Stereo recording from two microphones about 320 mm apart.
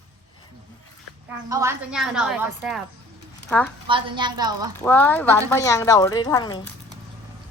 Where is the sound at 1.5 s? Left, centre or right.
Centre.